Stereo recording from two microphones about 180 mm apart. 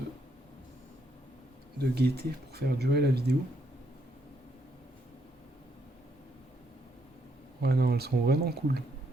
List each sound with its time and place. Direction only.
1.8 s speech: 60° right (ahead or behind)
7.6 s speech: 60° right (ahead or behind)